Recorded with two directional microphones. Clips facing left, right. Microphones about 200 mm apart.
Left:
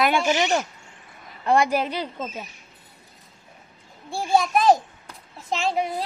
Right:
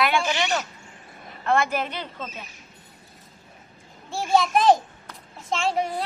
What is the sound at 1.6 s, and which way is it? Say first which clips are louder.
Speech: left 4 dB; 35° left (ahead or behind).